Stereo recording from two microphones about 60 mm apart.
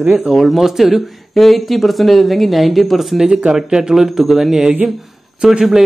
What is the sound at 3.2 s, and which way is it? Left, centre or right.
Speech, centre.